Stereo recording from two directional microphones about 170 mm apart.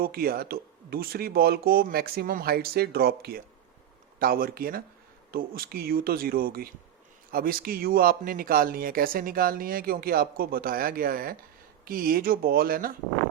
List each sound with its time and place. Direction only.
0.0 s speech: 60° right (ahead or behind)